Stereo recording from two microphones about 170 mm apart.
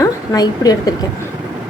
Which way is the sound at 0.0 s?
20° left (ahead or behind).